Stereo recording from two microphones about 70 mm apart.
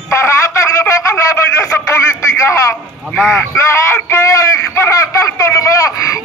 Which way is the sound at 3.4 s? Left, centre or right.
Left.